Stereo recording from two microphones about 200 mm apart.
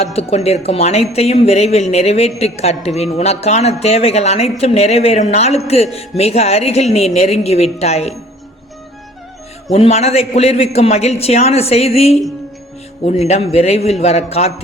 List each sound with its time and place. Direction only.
0.0 s speech: 30° left (ahead or behind)
9.7 s speech: 30° left (ahead or behind)